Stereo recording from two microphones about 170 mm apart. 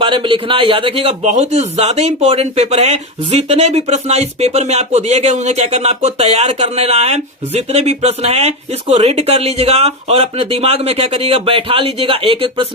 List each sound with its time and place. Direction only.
0.0 s a man's voice: 30° right (ahead or behind)